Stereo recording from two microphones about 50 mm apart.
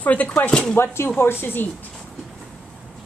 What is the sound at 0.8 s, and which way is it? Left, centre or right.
Speech, left.